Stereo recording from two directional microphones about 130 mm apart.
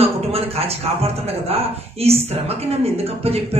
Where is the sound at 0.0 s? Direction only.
50° right (ahead or behind).